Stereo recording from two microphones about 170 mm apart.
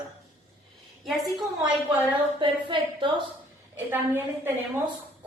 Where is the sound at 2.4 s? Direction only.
30° right (ahead or behind).